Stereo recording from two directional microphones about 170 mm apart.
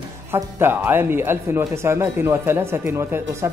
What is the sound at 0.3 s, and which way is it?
Speech, 15° right (ahead or behind).